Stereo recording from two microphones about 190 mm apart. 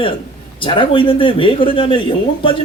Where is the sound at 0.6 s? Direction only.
25° left (ahead or behind).